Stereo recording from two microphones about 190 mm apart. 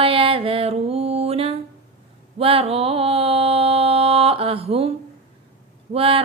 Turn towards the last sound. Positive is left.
turn(degrees=-30)  # may be behind; listen again after turning